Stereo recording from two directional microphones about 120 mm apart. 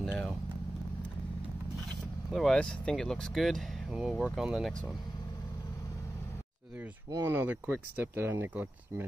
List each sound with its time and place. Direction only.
0.0 s vehicle: 5° left (ahead or behind)
2.3 s speech: 5° left (ahead or behind)
7.2 s speech: 15° right (ahead or behind)